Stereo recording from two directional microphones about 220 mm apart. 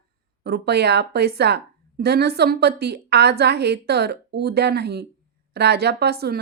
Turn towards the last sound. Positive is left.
turn(degrees=-45)  # may be behind; listen again after turning